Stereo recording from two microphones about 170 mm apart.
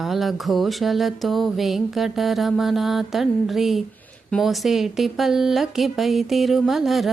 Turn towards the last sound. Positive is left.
turn(degrees=0)  # may be behind; listen again after turning